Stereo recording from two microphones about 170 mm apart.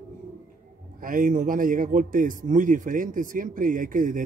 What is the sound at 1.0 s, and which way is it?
A man's voice, 50° right (ahead or behind).